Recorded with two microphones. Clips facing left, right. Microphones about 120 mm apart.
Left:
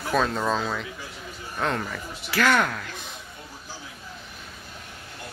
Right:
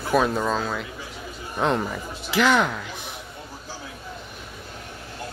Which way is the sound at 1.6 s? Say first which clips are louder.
Right 4 dB; 20° right (ahead or behind).